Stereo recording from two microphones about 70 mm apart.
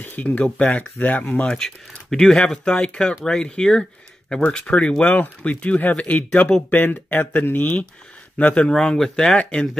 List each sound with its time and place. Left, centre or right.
0.0 s speech: left
1.5 s speech: centre